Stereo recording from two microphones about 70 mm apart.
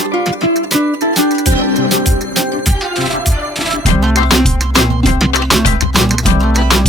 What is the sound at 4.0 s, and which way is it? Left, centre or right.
Music, centre.